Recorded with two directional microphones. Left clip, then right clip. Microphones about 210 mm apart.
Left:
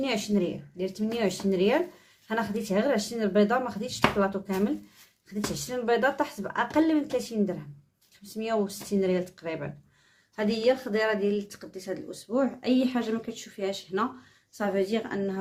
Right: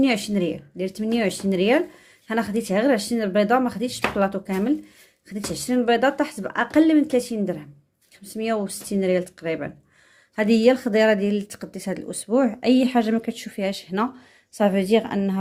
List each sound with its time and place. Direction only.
0.0 s speech: 35° right (ahead or behind)